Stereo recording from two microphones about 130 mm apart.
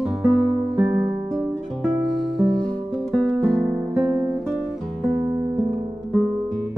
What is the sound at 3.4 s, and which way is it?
Guitar, 20° right (ahead or behind).